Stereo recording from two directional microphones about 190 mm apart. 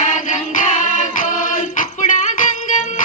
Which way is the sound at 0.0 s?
40° left (ahead or behind).